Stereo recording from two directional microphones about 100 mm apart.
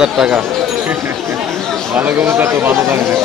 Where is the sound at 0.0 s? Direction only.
5° right (ahead or behind).